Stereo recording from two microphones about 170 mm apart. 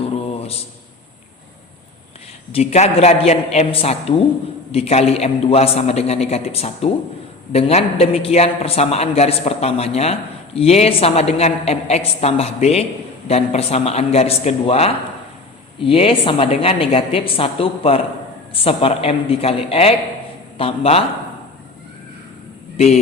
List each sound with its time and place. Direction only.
2.5 s a man's voice: 40° left (ahead or behind)